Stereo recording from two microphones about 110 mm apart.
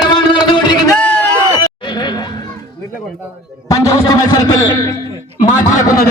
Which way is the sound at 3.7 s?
30° left (ahead or behind).